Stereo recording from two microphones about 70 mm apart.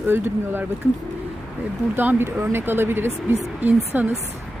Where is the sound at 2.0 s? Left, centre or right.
Right.